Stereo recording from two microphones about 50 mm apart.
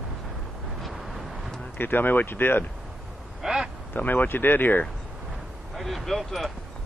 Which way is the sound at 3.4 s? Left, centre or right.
Centre.